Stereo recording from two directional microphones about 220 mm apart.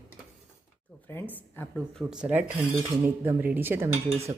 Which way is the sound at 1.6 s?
10° left (ahead or behind).